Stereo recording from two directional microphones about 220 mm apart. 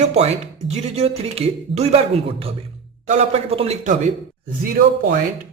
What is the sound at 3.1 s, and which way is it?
Speech, 30° right (ahead or behind).